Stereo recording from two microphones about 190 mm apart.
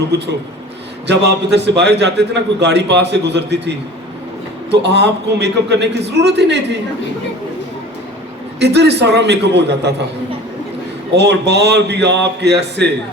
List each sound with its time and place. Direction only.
1.0 s a man's voice: 65° right (ahead or behind)
4.7 s a man's voice: 65° right (ahead or behind)
8.5 s a man's voice: 65° right (ahead or behind)
11.2 s a man's voice: 65° right (ahead or behind)